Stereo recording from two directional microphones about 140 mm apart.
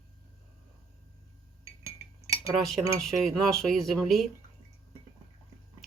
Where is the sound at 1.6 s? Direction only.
20° right (ahead or behind).